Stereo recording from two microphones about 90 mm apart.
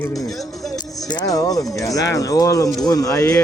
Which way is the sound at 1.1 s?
45° left (ahead or behind).